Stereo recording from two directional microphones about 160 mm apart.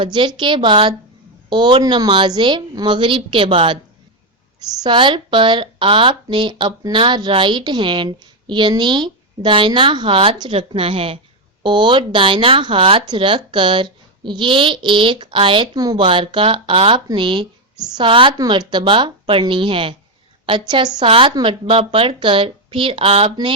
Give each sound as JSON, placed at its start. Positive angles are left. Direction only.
{"t": 0.0, "sound": "speech", "side_deg": -30}
{"t": 4.8, "sound": "speech", "side_deg": -30}